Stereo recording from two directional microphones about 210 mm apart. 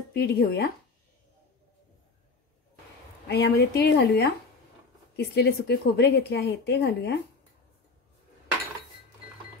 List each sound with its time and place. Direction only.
0.1 s a woman's voice: 45° left (ahead or behind)
3.3 s a woman's voice: 50° left (ahead or behind)